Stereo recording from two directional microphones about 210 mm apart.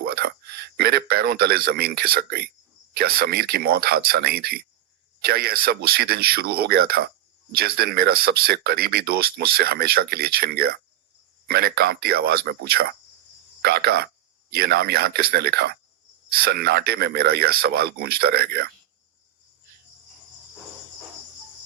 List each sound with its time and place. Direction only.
0.0 s speech: 50° right (ahead or behind)